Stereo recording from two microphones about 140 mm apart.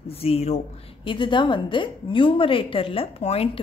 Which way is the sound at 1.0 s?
35° left (ahead or behind).